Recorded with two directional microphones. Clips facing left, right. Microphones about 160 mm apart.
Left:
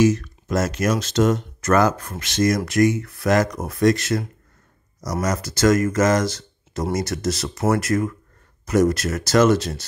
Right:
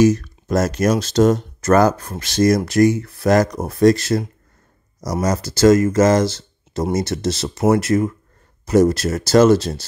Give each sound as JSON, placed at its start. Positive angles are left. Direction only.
{"t": 0.0, "sound": "speech", "side_deg": -40}